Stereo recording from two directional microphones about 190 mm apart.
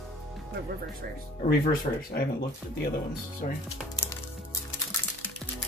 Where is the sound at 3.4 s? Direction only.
45° left (ahead or behind).